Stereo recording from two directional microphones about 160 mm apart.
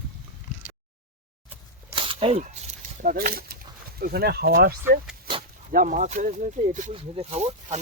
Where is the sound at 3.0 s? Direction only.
65° right (ahead or behind).